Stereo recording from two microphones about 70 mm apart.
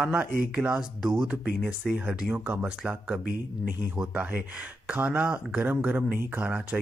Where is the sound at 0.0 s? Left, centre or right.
Right.